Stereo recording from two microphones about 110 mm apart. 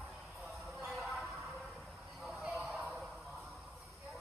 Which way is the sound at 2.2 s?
5° right (ahead or behind).